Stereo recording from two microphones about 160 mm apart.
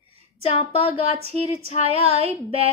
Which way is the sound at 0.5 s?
40° left (ahead or behind).